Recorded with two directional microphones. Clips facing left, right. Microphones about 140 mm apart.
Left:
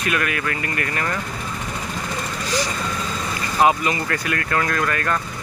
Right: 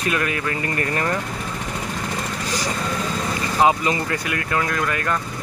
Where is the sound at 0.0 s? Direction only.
30° right (ahead or behind).